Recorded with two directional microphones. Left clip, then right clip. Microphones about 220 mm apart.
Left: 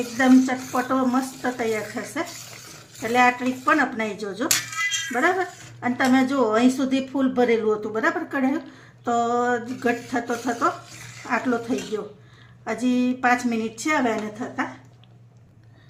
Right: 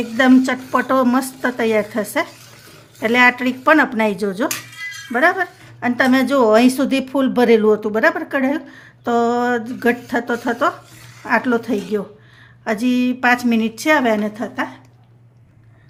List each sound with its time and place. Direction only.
0.2 s a woman's voice: 50° right (ahead or behind)
12.6 s speech: 50° right (ahead or behind)